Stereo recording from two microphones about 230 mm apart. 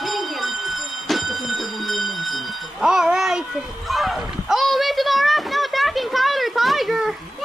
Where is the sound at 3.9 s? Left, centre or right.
Centre.